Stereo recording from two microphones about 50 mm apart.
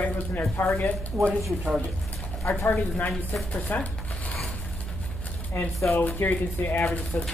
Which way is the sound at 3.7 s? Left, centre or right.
Left.